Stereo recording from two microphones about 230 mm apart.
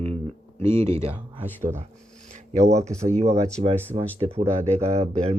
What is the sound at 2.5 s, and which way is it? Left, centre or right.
Speech, right.